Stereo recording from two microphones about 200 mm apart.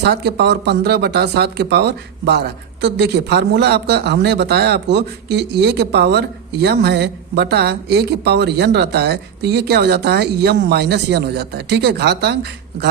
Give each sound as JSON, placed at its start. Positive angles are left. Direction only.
{"t": 0.0, "sound": "speech", "side_deg": -55}